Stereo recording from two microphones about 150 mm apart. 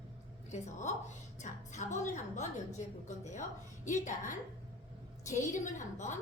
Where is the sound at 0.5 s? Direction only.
50° left (ahead or behind).